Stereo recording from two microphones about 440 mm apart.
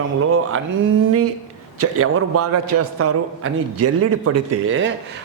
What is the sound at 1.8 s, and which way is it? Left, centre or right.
A man's voice, right.